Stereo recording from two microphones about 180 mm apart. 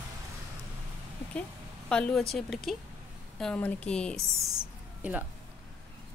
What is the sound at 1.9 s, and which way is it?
Speech, 5° left (ahead or behind).